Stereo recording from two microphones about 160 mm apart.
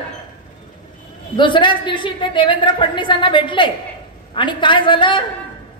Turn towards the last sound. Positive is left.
turn(degrees=30)  # may be behind; listen again after turning